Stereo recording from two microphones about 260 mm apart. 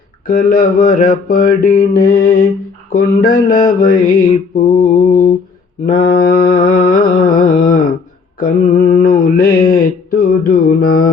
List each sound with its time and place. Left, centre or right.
0.3 s mantra: left